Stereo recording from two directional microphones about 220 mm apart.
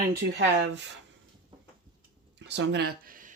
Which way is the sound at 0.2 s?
50° right (ahead or behind).